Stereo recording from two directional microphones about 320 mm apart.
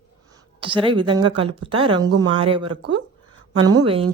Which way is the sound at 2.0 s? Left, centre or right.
Right.